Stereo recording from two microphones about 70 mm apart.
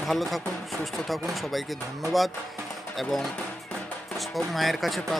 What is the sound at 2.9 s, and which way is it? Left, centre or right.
Speech, centre.